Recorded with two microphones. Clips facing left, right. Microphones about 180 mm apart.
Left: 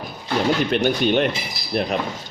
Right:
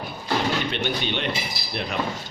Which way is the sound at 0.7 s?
45° left (ahead or behind).